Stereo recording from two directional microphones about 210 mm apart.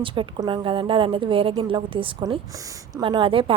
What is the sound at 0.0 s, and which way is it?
A woman's voice, 25° right (ahead or behind).